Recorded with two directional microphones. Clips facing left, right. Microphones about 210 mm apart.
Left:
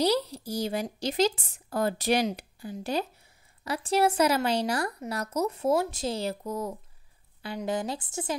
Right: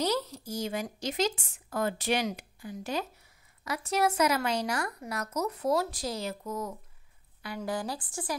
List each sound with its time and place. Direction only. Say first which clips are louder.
0.0 s speech: left 4 dB; 35° left (ahead or behind)
7.4 s speech: left 3 dB; 20° left (ahead or behind)